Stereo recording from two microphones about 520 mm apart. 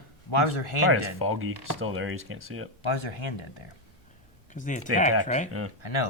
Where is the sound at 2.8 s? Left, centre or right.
Left.